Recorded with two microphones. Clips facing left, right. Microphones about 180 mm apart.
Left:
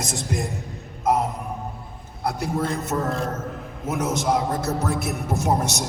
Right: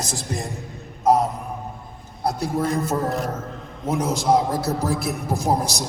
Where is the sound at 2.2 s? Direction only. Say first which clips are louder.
Right 2 dB; 35° right (ahead or behind).